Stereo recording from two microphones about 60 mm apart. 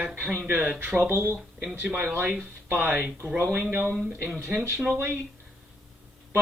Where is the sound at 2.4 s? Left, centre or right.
Right.